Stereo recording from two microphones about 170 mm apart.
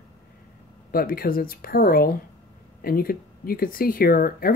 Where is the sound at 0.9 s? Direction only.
60° left (ahead or behind).